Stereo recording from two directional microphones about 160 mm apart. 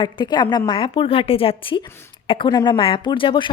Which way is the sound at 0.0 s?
30° left (ahead or behind).